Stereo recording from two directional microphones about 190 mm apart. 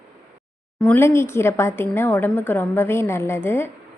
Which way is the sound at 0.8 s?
10° left (ahead or behind).